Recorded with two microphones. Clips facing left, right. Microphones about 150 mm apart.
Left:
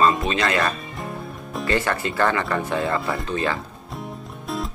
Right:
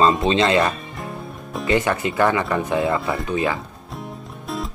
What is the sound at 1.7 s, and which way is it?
Speech, 15° right (ahead or behind).